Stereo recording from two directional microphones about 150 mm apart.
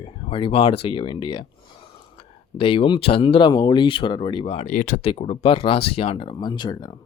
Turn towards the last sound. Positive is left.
turn(degrees=30)  # may be behind; listen again after turning